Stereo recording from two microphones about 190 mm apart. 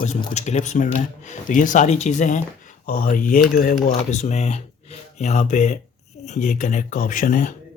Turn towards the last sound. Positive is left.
turn(degrees=40)  # may be behind; listen again after turning